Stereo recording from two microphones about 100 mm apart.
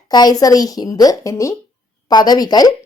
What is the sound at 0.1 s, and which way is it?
Speech, 45° left (ahead or behind).